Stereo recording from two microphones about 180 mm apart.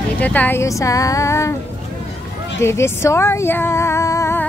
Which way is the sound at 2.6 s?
15° left (ahead or behind).